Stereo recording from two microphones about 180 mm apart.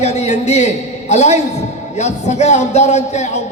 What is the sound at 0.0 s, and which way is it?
A man's voice, 40° left (ahead or behind).